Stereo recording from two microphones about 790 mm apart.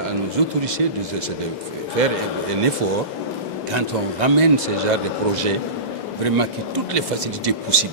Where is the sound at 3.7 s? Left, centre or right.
Right.